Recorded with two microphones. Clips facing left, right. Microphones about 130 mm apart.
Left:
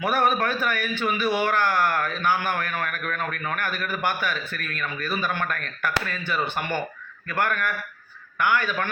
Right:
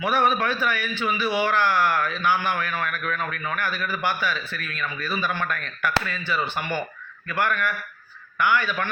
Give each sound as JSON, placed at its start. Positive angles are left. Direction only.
{"t": 0.0, "sound": "a man's voice", "side_deg": 45}